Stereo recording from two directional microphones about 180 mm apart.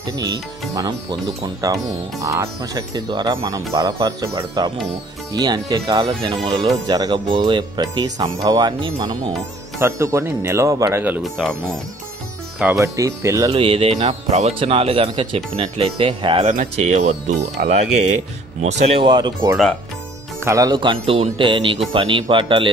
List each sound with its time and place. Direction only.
1.4 s speech: 20° right (ahead or behind); by 11.5 s centre (ahead or behind)
12.7 s speech: 20° right (ahead or behind)
13.5 s speech: 30° right (ahead or behind)
18.7 s speech: 25° right (ahead or behind)